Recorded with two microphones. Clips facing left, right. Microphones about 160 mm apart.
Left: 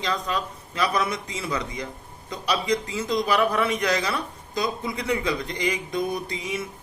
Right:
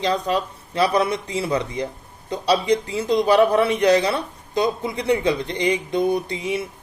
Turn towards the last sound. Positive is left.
turn(degrees=-30)  # may be behind; listen again after turning